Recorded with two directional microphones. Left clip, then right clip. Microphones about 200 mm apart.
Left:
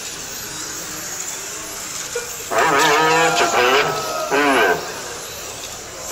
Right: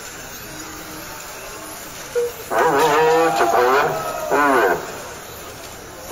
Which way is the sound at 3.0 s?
30° right (ahead or behind).